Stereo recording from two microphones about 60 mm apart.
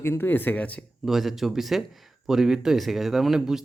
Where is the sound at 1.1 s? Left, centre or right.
Centre.